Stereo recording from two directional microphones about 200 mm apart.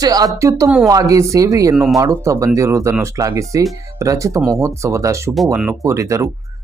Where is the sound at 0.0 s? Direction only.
20° right (ahead or behind).